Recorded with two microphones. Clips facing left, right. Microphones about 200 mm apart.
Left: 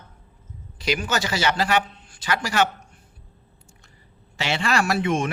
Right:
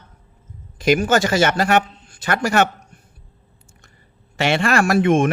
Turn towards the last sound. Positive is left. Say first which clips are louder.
# right 7 dB
turn(degrees=-50)  # may be behind; listen again after turning